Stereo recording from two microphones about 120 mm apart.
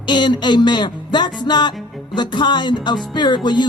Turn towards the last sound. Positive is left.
turn(degrees=40)  # may be behind; listen again after turning